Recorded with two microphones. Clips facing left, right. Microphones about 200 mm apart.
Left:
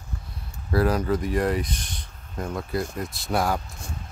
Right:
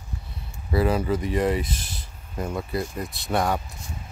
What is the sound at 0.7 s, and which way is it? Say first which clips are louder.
Speech: even; 5° right (ahead or behind).